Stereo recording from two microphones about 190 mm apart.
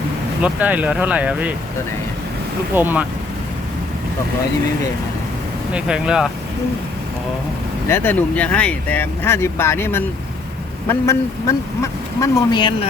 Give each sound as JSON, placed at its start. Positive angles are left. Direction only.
{"t": 0.4, "sound": "speech", "side_deg": -5}
{"t": 2.7, "sound": "speech", "side_deg": -10}
{"t": 5.7, "sound": "speech", "side_deg": -5}
{"t": 7.9, "sound": "speech", "side_deg": 10}